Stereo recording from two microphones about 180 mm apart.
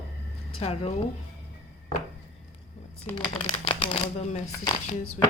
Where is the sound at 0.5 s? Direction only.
30° left (ahead or behind).